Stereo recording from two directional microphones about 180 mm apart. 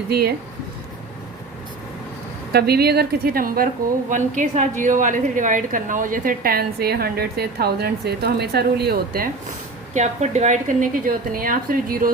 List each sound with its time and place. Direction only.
0.1 s a woman's voice: 60° right (ahead or behind)
2.5 s a woman's voice: 60° right (ahead or behind)
9.9 s a woman's voice: 40° right (ahead or behind)